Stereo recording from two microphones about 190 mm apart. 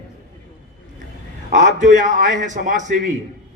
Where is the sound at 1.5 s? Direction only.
40° right (ahead or behind).